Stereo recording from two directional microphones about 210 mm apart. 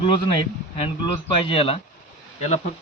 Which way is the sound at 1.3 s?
25° left (ahead or behind).